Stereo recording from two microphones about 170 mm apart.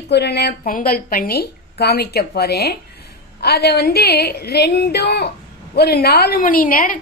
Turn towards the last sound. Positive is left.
turn(degrees=55)  # may be behind; listen again after turning